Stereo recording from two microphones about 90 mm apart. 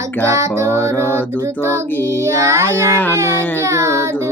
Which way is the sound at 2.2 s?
30° right (ahead or behind).